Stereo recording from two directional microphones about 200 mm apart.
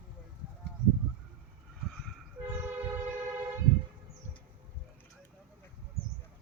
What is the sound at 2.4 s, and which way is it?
Train, 10° right (ahead or behind).